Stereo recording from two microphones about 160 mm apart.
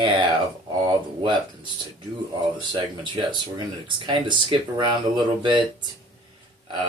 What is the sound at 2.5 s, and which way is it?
Speech, 30° right (ahead or behind).